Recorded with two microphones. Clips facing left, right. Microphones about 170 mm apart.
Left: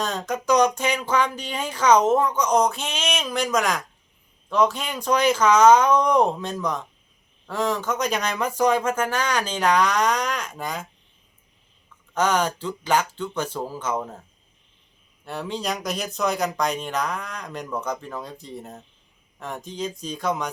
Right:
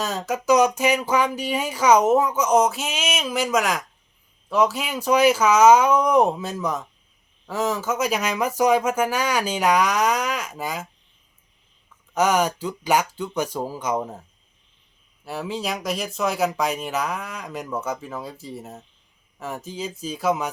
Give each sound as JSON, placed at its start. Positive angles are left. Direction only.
{"t": 0.0, "sound": "speech", "side_deg": -5}
{"t": 12.1, "sound": "speech", "side_deg": -10}